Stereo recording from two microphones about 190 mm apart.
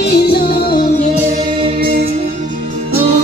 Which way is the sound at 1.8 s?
55° right (ahead or behind).